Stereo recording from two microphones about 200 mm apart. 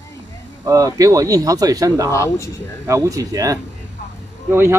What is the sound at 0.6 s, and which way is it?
Speech, 15° right (ahead or behind).